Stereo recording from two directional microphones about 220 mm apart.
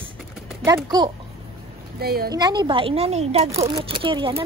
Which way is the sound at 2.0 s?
45° right (ahead or behind).